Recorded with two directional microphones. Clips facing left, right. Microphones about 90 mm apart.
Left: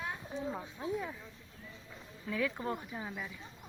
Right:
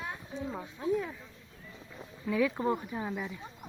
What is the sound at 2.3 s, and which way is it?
Speech, 15° right (ahead or behind).